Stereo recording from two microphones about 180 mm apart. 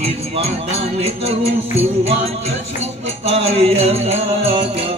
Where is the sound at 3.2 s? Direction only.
35° right (ahead or behind).